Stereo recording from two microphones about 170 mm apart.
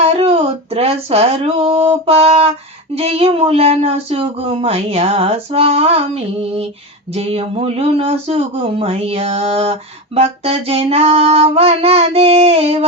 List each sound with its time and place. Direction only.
0.0 s speech: 35° right (ahead or behind)
7.1 s speech: 35° right (ahead or behind)